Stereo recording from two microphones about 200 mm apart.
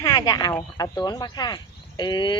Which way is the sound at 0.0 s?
20° left (ahead or behind).